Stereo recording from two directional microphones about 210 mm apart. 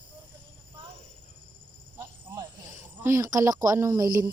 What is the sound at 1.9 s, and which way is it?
Speech, 15° right (ahead or behind).